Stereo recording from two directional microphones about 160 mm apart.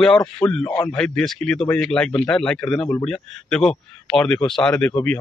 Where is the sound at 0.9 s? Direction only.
5° left (ahead or behind).